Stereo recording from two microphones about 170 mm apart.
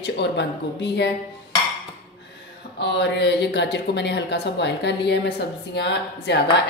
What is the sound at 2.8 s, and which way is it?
A woman's voice, 90° left.